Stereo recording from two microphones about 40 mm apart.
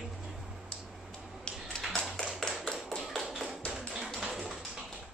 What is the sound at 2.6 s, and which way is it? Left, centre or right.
Tap, left.